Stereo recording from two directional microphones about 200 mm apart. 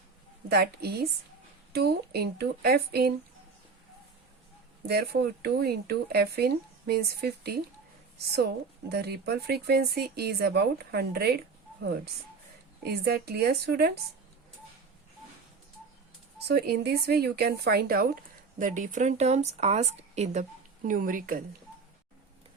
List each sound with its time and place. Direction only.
0.4 s speech: 55° right (ahead or behind)
4.9 s speech: 55° right (ahead or behind)
8.9 s speech: 55° right (ahead or behind)
12.8 s speech: 50° right (ahead or behind)
16.5 s a woman's voice: 55° right (ahead or behind)